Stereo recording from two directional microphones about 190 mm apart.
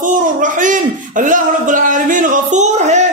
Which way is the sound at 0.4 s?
45° right (ahead or behind).